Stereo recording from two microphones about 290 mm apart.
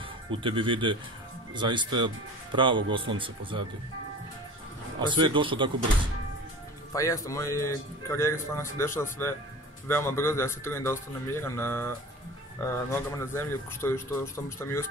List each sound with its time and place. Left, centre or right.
0.3 s speech: centre
5.0 s speech: centre
6.9 s speech: centre